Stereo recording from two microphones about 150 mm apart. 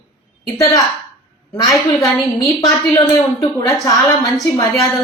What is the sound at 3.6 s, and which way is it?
Speech, 25° left (ahead or behind).